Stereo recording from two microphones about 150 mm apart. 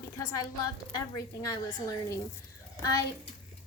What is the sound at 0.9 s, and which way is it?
Speech, 20° left (ahead or behind).